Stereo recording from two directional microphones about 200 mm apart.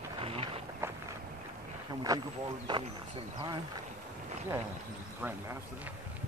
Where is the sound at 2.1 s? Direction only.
15° right (ahead or behind).